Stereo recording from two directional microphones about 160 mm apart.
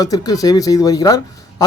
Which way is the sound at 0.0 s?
25° left (ahead or behind).